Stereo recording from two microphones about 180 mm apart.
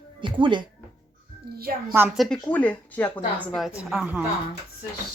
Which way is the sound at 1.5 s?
55° right (ahead or behind).